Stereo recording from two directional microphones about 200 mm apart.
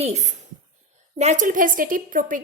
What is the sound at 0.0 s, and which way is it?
A woman's voice, 35° right (ahead or behind).